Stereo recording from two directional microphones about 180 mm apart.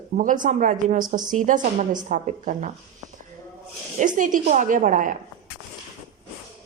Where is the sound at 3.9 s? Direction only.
45° right (ahead or behind).